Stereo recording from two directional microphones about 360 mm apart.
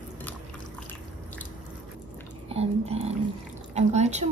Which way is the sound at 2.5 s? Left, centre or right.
Centre.